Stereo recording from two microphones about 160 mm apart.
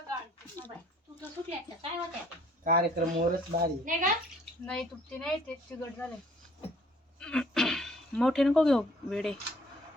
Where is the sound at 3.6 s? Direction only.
55° right (ahead or behind).